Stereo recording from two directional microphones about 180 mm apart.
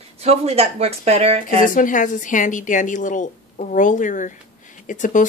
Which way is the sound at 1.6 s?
45° left (ahead or behind).